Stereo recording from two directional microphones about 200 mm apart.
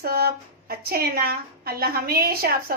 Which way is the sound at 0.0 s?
50° right (ahead or behind).